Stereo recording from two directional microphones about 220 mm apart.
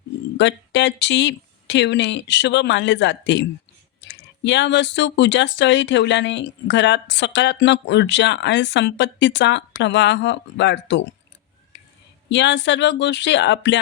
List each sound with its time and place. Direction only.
0.3 s speech: 55° left (ahead or behind)
11.7 s a sound: 55° left (ahead or behind)
12.3 s speech: 55° left (ahead or behind)